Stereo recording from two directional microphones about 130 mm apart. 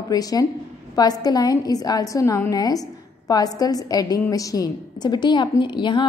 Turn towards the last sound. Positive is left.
turn(degrees=35)  # may be behind; listen again after turning